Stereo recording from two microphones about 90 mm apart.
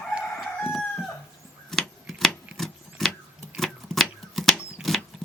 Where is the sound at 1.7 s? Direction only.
5° left (ahead or behind).